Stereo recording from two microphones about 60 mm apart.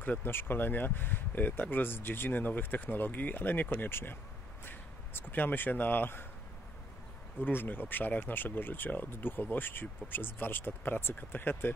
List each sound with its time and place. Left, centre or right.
0.2 s speech: left
7.3 s speech: left